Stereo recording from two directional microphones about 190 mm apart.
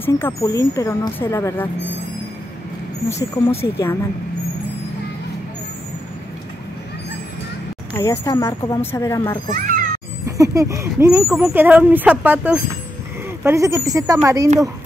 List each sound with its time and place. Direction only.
0.0 s speech: 15° left (ahead or behind)
3.1 s speech: 15° left (ahead or behind)
8.0 s speech: 15° left (ahead or behind)
10.2 s speech: 15° right (ahead or behind)